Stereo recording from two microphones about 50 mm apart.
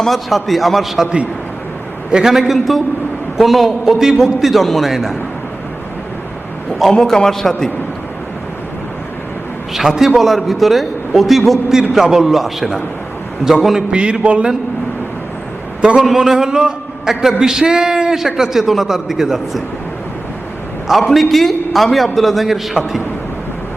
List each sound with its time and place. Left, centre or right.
0.0 s a man's voice: centre
2.1 s a man's voice: centre
6.8 s a man's voice: centre
9.7 s a man's voice: centre
13.9 s a sound: right
15.8 s a man's voice: centre
16.0 s a man's voice: centre
21.1 s a man's voice: centre